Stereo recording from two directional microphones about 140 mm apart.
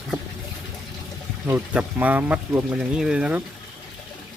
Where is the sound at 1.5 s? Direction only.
10° right (ahead or behind).